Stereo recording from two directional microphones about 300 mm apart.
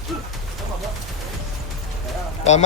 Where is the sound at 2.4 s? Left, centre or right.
Left.